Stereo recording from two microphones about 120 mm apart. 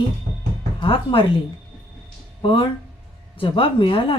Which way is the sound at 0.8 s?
45° left (ahead or behind).